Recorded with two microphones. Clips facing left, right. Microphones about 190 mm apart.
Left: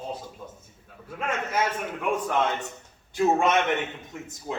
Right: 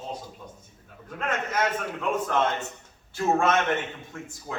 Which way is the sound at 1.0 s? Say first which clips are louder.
Even; 10° left (ahead or behind).